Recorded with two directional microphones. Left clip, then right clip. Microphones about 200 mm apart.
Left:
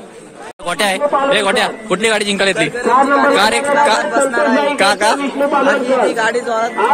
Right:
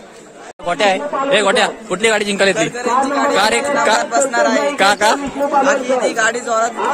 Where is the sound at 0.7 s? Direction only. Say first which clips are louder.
Right 2 dB; 10° left (ahead or behind).